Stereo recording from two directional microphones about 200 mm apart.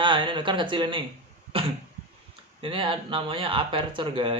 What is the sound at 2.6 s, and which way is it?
Speech, 25° right (ahead or behind).